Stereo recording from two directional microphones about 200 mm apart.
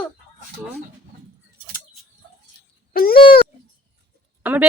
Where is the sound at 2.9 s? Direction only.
50° left (ahead or behind).